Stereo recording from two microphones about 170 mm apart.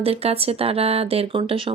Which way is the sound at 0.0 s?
35° right (ahead or behind).